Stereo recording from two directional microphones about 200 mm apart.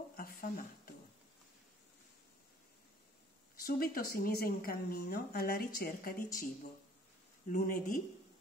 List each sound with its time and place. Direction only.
0.1 s a sound: 45° left (ahead or behind)
3.5 s speech: 45° left (ahead or behind)
7.4 s speech: 45° left (ahead or behind)